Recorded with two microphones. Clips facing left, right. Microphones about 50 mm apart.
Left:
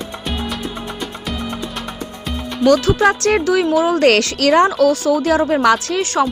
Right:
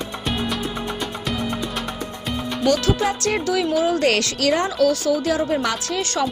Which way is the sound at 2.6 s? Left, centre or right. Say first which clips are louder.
Left 7 dB; left.